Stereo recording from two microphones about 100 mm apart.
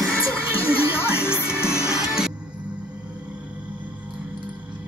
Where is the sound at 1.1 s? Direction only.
25° left (ahead or behind).